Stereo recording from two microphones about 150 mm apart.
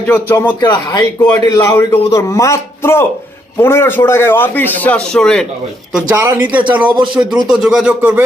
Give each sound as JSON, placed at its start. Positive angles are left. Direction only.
{"t": 0.1, "sound": "a man's voice", "side_deg": 15}
{"t": 0.4, "sound": "a man's voice", "side_deg": 30}
{"t": 6.1, "sound": "speech", "side_deg": -15}